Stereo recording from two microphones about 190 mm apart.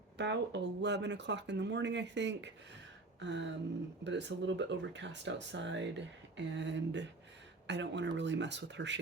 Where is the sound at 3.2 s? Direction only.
70° right (ahead or behind).